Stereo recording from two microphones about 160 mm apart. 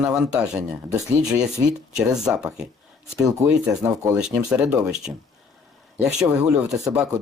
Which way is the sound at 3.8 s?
20° right (ahead or behind).